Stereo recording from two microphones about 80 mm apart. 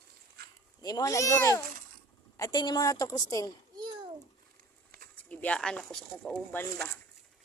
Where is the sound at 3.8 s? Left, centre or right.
Right.